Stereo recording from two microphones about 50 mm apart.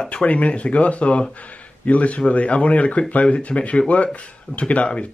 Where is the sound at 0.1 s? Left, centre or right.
Left.